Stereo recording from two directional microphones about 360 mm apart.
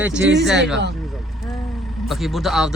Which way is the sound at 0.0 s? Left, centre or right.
Centre.